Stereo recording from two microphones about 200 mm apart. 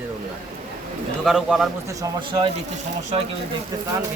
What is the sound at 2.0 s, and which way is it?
Speech, 20° right (ahead or behind).